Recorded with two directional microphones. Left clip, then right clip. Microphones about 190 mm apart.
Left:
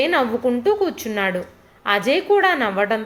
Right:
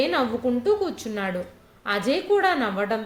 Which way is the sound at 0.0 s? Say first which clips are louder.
Left 5 dB; 25° left (ahead or behind).